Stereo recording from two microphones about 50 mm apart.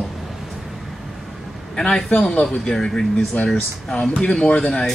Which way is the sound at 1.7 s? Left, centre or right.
Centre.